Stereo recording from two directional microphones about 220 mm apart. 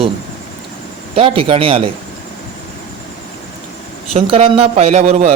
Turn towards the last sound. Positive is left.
turn(degrees=-30)  # may be behind; listen again after turning